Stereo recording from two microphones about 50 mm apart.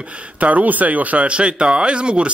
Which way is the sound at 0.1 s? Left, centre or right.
Right.